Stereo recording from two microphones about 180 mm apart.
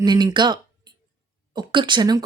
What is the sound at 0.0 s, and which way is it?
A woman's voice, 25° right (ahead or behind).